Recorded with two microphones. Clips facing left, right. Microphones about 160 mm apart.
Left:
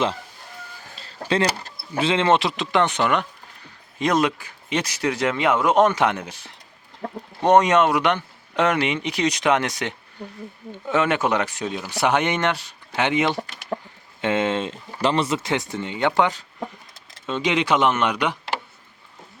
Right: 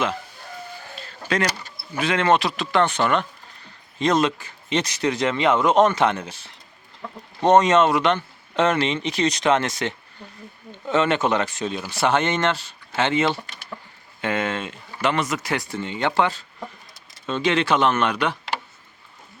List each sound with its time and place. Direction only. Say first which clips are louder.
0.9 s a sound: left 2 dB; 30° left (ahead or behind)
2.0 s speech: left 1 dB; 25° left (ahead or behind)
7.0 s speech: left 5 dB; 45° left (ahead or behind)
7.4 s speech: even; 15° left (ahead or behind)